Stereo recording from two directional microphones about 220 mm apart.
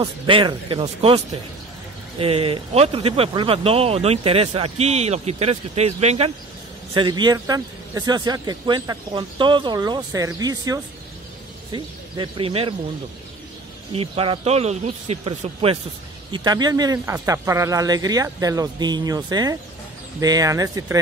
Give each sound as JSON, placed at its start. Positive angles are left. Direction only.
{"t": 0.0, "sound": "speech", "side_deg": -25}
{"t": 13.9, "sound": "speech", "side_deg": -25}